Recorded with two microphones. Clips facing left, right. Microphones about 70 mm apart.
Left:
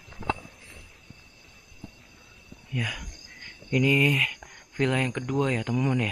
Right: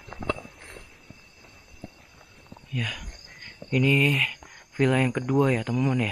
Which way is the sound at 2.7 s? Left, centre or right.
Centre.